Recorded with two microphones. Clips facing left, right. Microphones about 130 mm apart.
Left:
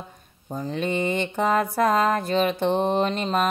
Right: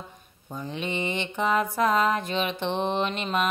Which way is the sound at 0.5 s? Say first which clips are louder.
Left 5 dB; 35° left (ahead or behind).